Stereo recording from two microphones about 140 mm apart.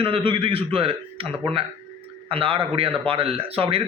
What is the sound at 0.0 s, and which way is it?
A man's voice, 40° right (ahead or behind).